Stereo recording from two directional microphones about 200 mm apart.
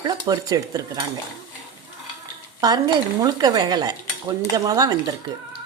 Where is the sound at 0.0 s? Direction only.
20° right (ahead or behind).